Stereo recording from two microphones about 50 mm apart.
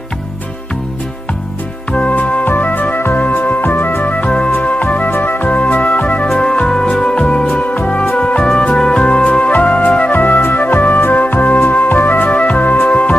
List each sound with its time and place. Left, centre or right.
1.9 s music: left
4.3 s music: left
4.5 s music: left
5.5 s music: left
12.9 s music: left